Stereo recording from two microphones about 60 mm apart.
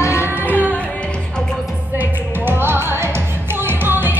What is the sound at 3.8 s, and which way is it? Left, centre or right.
Music, right.